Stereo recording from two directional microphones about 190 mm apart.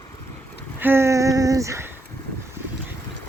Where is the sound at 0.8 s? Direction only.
10° right (ahead or behind).